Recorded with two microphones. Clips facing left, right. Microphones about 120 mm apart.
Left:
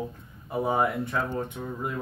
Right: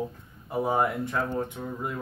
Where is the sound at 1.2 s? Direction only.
Centre (ahead or behind).